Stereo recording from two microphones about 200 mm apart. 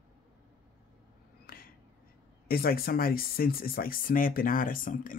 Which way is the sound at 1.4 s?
45° left (ahead or behind).